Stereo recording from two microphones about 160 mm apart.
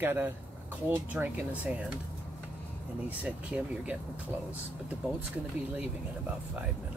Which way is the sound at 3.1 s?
10° right (ahead or behind).